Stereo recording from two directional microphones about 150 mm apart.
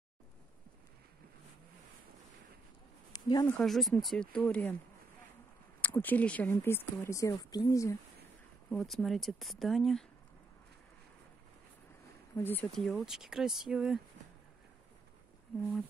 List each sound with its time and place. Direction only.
3.1 s a sound: 25° left (ahead or behind)
3.4 s speech: 5° left (ahead or behind)
5.8 s speech: 10° left (ahead or behind)
8.6 s speech: centre (ahead or behind)
12.4 s speech: 15° left (ahead or behind)
12.7 s speech: centre (ahead or behind)